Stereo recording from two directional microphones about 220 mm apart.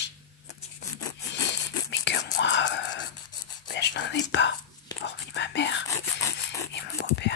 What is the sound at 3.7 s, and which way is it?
Whispering, 50° left (ahead or behind).